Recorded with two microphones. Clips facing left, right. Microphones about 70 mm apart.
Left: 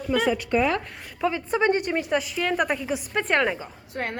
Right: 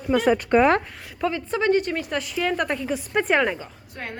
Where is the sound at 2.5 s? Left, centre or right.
Centre.